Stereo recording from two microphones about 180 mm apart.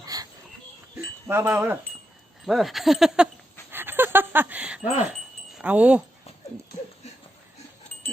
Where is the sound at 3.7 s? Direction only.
10° right (ahead or behind).